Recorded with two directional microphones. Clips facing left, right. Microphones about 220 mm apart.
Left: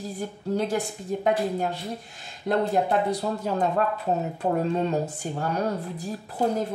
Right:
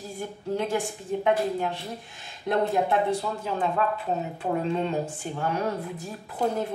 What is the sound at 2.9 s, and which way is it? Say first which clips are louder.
Speech: left 1 dB; 40° left (ahead or behind).